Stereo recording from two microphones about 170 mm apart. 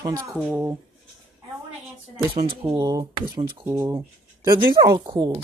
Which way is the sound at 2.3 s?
30° right (ahead or behind).